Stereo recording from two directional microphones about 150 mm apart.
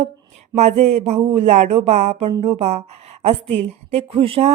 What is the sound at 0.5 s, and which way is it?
Speech, 45° right (ahead or behind).